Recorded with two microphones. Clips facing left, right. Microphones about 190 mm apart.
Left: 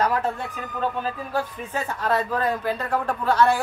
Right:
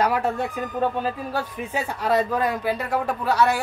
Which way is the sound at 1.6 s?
10° right (ahead or behind).